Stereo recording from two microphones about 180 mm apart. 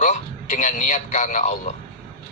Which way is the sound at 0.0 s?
45° left (ahead or behind).